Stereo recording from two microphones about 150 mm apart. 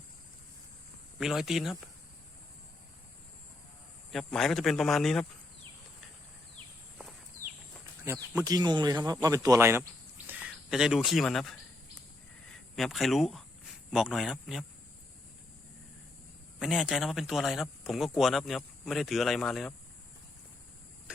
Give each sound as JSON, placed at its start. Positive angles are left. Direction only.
{"t": 1.2, "sound": "speech", "side_deg": 0}
{"t": 4.1, "sound": "speech", "side_deg": 5}
{"t": 8.4, "sound": "speech", "side_deg": -25}
{"t": 12.7, "sound": "speech", "side_deg": 0}
{"t": 16.6, "sound": "speech", "side_deg": 0}